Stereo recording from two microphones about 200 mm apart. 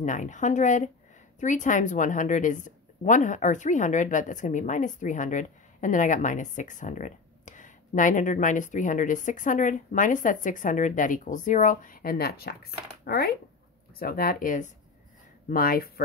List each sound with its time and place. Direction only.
0.0 s a woman's voice: 40° left (ahead or behind)